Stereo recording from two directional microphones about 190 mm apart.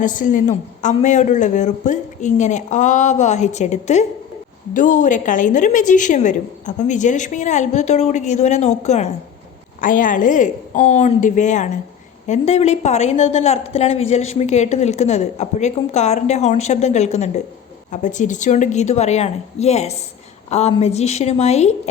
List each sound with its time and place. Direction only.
0.0 s a woman's voice: 40° left (ahead or behind)